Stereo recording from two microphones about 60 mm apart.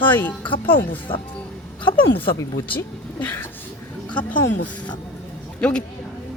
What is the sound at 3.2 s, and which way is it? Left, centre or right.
Speech, left.